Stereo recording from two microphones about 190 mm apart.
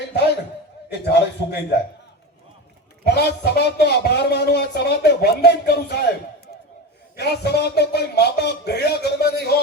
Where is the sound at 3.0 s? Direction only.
60° left (ahead or behind).